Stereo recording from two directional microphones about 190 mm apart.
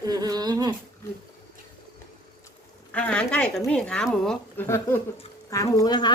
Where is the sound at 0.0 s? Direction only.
20° right (ahead or behind).